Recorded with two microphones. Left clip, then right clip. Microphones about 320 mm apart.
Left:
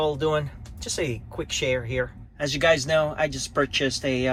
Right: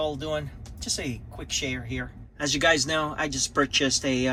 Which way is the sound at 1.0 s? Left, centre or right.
Right.